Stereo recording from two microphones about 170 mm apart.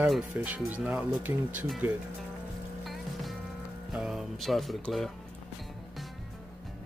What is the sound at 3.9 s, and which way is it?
Speech, 5° right (ahead or behind).